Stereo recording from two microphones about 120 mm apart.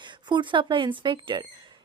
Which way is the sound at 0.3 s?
40° right (ahead or behind).